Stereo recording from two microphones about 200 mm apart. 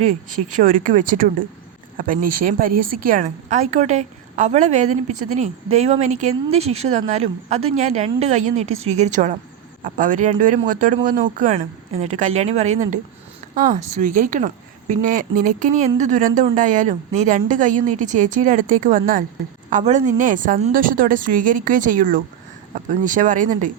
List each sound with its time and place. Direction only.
0.0 s a woman's voice: 40° right (ahead or behind)